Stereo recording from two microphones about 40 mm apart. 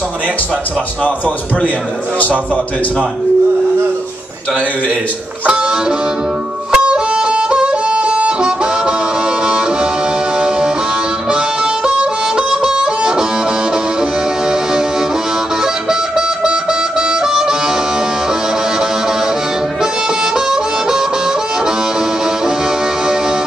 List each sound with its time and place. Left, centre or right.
2.1 s speech: left
5.5 s music: right
11.2 s harmonica: right
14.5 s music: centre
17.1 s harmonica: centre
20.3 s harmonica: centre